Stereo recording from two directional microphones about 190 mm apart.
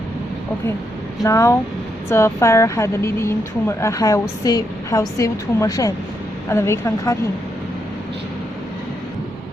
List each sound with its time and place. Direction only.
1.2 s speech: 15° left (ahead or behind)